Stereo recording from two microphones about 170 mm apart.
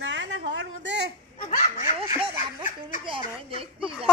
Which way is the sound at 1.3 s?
45° left (ahead or behind).